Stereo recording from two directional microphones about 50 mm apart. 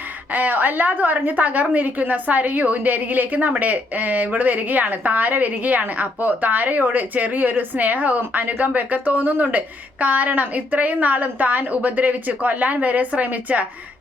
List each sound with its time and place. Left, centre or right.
0.3 s a woman's voice: right